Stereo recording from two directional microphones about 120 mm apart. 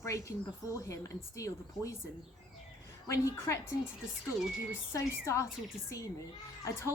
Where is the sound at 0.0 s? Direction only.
25° left (ahead or behind).